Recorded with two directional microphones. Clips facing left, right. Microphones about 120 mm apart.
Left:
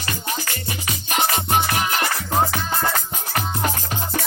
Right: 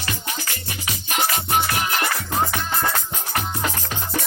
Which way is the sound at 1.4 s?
30° left (ahead or behind).